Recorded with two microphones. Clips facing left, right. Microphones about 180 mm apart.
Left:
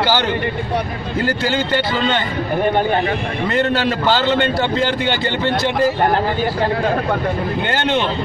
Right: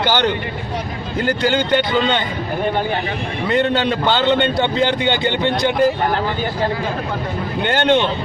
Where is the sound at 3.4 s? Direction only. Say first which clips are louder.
Right 1 dB; centre (ahead or behind).